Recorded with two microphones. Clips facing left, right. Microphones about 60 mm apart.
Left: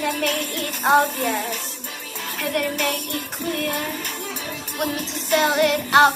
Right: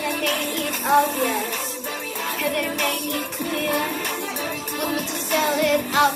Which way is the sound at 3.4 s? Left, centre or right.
Right.